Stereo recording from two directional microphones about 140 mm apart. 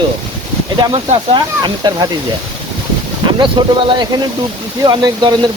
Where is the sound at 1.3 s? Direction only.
30° right (ahead or behind).